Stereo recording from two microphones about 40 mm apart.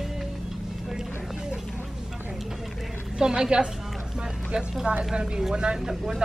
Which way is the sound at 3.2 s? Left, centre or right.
Right.